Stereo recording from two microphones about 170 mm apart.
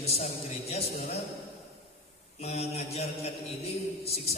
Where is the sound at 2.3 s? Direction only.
35° left (ahead or behind).